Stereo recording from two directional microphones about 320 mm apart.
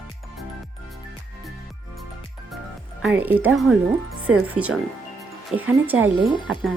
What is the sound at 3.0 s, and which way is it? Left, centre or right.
Speech, centre.